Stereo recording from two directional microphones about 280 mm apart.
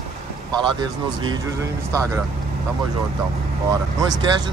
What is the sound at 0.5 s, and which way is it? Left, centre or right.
Speech, centre.